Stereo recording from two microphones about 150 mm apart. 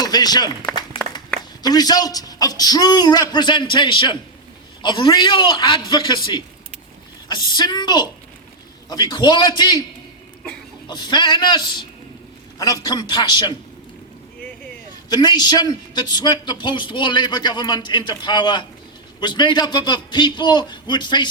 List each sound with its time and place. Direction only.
0.0 s speech: 25° left (ahead or behind)
1.6 s a man's voice: 25° left (ahead or behind)
10.8 s a man's voice: 30° left (ahead or behind)
15.1 s a man's voice: 25° left (ahead or behind)